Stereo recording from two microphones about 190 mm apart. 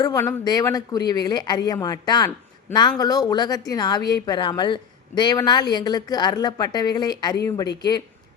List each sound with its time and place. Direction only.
0.0 s speech: 15° left (ahead or behind)